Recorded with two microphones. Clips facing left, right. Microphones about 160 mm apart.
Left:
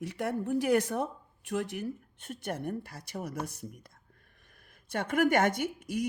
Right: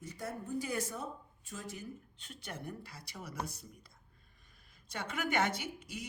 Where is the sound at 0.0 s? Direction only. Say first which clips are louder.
Left 10 dB; 75° left (ahead or behind); by 3.7 s 50° left (ahead or behind).